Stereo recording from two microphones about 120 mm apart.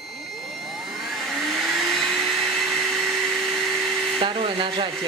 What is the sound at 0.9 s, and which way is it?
Vacuum cleaner, centre (ahead or behind).